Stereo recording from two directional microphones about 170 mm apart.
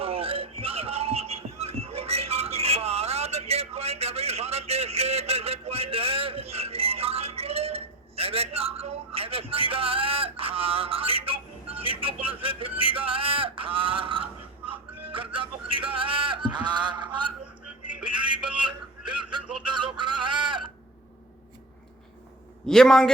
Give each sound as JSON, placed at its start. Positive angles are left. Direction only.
{"t": 0.0, "sound": "music", "side_deg": -35}
{"t": 19.7, "sound": "a sound", "side_deg": -30}
{"t": 22.6, "sound": "a man's voice", "side_deg": 5}